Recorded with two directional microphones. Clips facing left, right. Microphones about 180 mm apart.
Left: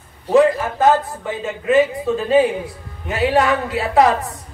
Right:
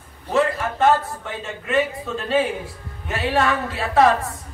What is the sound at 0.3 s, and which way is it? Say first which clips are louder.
Speech: left 7 dB; 15° left (ahead or behind).